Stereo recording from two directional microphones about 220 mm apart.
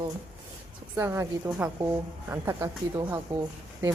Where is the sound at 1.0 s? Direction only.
10° right (ahead or behind).